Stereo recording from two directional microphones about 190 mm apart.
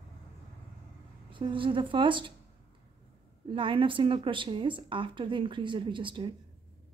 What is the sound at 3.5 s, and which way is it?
A woman's voice, 25° right (ahead or behind).